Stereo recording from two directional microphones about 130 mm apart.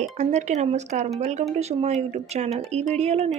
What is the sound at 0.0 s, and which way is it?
Speech, 65° right (ahead or behind).